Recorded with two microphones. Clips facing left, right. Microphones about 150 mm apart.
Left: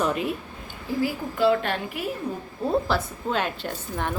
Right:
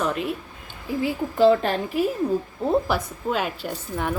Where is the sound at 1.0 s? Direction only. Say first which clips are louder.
Right 1 dB; 25° right (ahead or behind).